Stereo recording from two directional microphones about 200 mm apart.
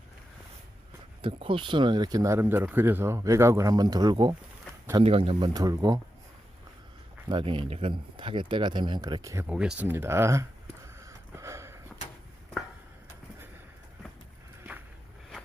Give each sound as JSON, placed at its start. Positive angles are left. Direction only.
{"t": 1.2, "sound": "speech", "side_deg": -25}
{"t": 7.3, "sound": "speech", "side_deg": -25}
{"t": 11.0, "sound": "a sound", "side_deg": -15}